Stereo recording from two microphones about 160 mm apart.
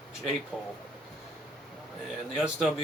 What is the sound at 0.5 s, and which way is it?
Speech, centre (ahead or behind).